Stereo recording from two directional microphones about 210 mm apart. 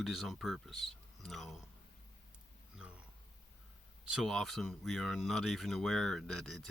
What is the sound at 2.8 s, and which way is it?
Wild animals, 5° right (ahead or behind).